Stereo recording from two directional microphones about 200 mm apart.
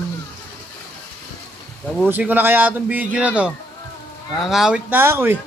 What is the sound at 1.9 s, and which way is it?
Speech, 5° right (ahead or behind).